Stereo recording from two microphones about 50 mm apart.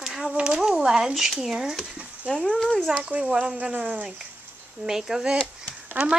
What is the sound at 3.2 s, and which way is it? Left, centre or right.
Speech, centre.